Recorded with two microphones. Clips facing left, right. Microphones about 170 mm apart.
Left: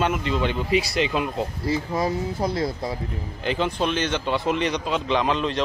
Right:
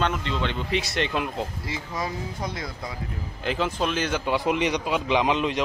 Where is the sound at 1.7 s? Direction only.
35° left (ahead or behind).